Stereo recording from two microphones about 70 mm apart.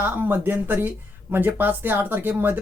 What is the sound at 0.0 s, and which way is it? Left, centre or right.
Speech, right.